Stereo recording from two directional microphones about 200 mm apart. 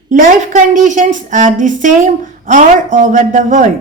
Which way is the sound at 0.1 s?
40° right (ahead or behind).